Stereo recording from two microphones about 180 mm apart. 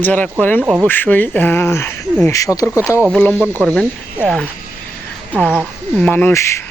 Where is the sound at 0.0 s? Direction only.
10° left (ahead or behind).